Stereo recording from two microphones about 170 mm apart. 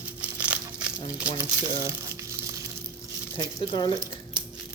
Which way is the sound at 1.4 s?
15° right (ahead or behind).